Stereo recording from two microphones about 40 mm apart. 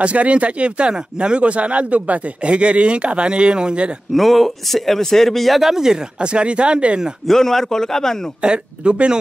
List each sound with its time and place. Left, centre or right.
0.0 s speech: right
4.1 s speech: centre
5.6 s speech: centre
6.1 s speech: right
7.2 s a man's voice: centre
8.4 s speech: right